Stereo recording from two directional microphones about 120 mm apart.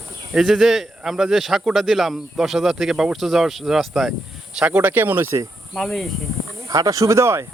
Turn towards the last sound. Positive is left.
turn(degrees=-25)  # may be behind; listen again after turning